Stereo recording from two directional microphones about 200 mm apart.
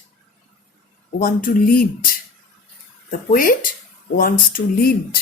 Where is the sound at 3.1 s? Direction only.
45° left (ahead or behind).